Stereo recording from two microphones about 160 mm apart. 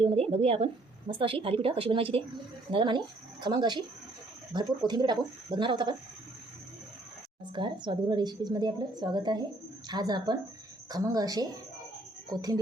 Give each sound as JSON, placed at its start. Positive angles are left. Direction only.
{"t": 0.0, "sound": "a woman's voice", "side_deg": -40}
{"t": 7.5, "sound": "a woman's voice", "side_deg": -30}